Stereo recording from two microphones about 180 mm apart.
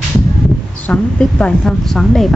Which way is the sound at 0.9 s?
5° left (ahead or behind).